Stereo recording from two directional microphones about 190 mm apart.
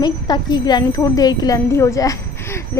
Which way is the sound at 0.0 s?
20° left (ahead or behind).